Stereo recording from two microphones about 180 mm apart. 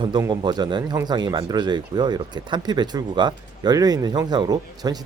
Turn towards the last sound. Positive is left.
turn(degrees=-20)  # may be behind; listen again after turning